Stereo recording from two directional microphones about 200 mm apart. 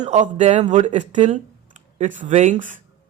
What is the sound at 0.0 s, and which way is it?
Speech, 35° right (ahead or behind).